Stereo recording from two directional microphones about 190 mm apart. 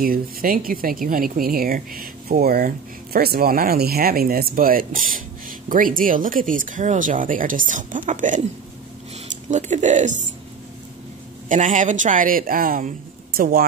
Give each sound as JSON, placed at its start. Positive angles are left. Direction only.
{"t": 0.0, "sound": "speech", "side_deg": -50}
{"t": 9.5, "sound": "speech", "side_deg": -40}
{"t": 11.4, "sound": "speech", "side_deg": -40}